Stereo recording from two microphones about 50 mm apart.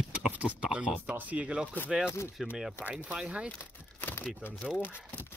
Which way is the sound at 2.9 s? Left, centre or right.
Right.